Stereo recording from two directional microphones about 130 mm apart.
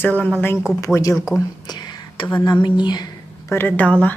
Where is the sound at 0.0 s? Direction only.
10° left (ahead or behind).